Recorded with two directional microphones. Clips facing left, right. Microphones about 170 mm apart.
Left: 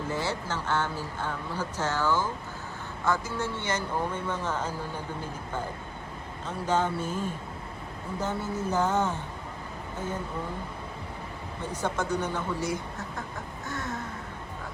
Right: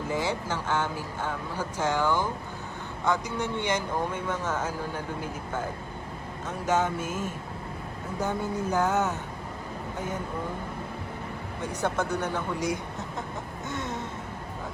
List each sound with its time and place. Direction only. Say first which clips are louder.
0.1 s speech: right 3 dB; 10° right (ahead or behind)
6.7 s speech: right 1 dB; 10° right (ahead or behind)
12.1 s speech: even; 10° left (ahead or behind)
12.5 s speech: right 1 dB; 20° right (ahead or behind)
13.7 s a sound: right 1 dB; 20° right (ahead or behind)